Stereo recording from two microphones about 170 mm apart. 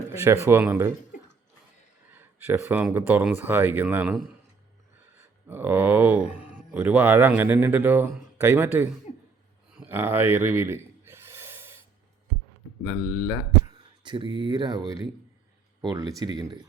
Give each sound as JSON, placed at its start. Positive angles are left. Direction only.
{"t": 0.1, "sound": "speech", "side_deg": -15}
{"t": 2.1, "sound": "speech", "side_deg": -10}
{"t": 5.5, "sound": "speech", "side_deg": -10}
{"t": 9.7, "sound": "gasp", "side_deg": -10}
{"t": 12.8, "sound": "speech", "side_deg": -5}
{"t": 14.0, "sound": "speech", "side_deg": -25}